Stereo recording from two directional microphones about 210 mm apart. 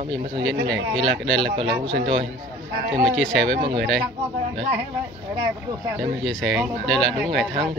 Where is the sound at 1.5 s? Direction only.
25° right (ahead or behind).